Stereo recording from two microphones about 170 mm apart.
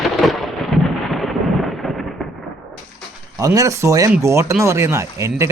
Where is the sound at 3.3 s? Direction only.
20° right (ahead or behind).